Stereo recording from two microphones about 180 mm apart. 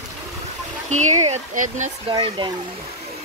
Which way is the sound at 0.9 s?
45° right (ahead or behind).